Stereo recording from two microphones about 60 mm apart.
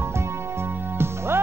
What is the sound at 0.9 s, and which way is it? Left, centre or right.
Music, right.